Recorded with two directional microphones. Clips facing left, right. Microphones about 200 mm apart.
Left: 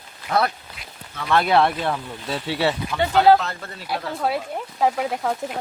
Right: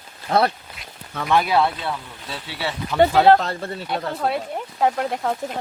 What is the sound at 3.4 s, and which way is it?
Speech, 30° right (ahead or behind).